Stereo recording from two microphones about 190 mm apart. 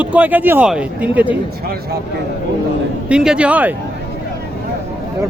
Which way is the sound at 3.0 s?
5° right (ahead or behind).